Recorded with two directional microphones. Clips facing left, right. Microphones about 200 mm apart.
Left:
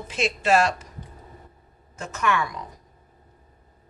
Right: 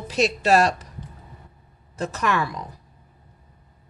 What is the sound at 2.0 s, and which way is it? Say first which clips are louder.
Speech: right 1 dB; 35° right (ahead or behind).